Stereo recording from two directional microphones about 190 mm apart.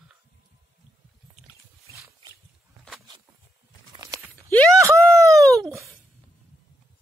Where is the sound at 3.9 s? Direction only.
20° right (ahead or behind).